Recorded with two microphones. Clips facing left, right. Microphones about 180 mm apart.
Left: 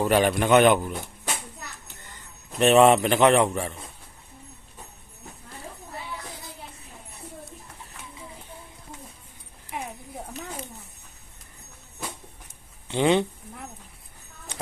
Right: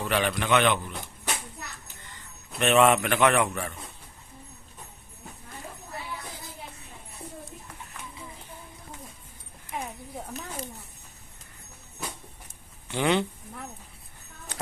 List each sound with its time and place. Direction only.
0.0 s a man's voice: 40° left (ahead or behind)
2.6 s a man's voice: 35° left (ahead or behind)
12.9 s speech: 25° left (ahead or behind)